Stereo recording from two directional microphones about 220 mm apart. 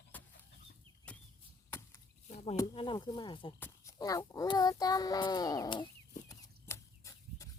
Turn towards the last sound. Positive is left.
turn(degrees=15)  # may be behind; listen again after turning